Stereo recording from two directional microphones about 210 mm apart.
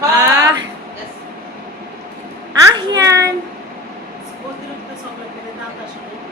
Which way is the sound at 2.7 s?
15° right (ahead or behind).